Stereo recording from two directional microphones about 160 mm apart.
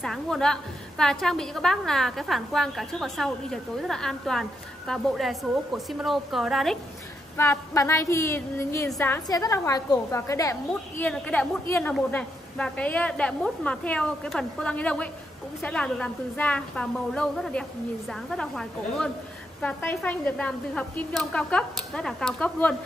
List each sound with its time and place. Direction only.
0.0 s a woman's voice: 5° left (ahead or behind)
7.3 s a woman's voice: 15° left (ahead or behind)